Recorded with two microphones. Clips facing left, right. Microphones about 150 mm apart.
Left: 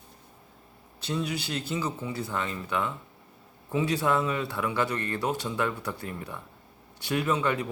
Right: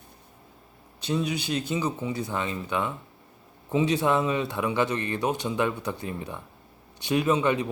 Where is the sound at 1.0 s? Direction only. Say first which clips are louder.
Right 3 dB; 20° right (ahead or behind).